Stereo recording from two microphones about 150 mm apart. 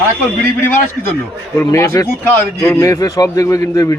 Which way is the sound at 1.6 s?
20° left (ahead or behind).